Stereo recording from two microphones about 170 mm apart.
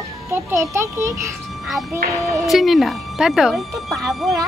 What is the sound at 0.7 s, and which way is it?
Speech, 15° right (ahead or behind).